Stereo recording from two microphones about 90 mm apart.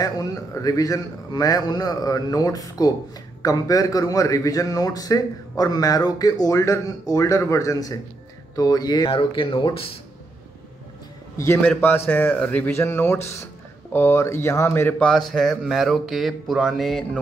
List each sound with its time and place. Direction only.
0.0 s a man's voice: 45° left (ahead or behind)
9.1 s speech: 80° left
11.3 s a man's voice: 30° left (ahead or behind)
12.1 s a man's voice: 15° left (ahead or behind)
15.0 s speech: 5° left (ahead or behind)